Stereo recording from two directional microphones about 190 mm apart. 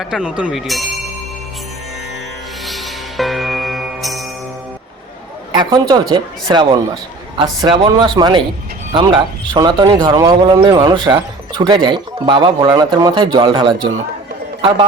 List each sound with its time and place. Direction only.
0.0 s speech: 5° right (ahead or behind)
2.6 s music: centre (ahead or behind)
5.5 s speech: 20° right (ahead or behind)